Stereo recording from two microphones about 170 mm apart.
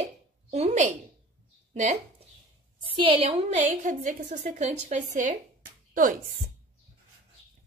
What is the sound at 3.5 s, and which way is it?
A woman's voice, 50° right (ahead or behind).